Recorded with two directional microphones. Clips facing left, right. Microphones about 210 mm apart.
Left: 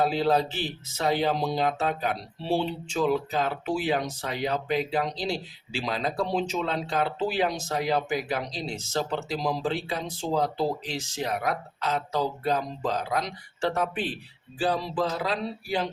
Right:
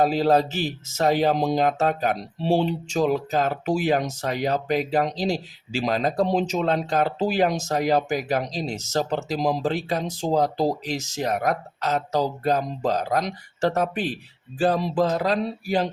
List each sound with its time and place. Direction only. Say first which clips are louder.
0.0 s speech: right 4 dB; 45° right (ahead or behind)